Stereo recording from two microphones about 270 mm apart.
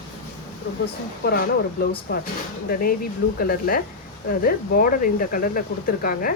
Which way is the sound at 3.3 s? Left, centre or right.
Left.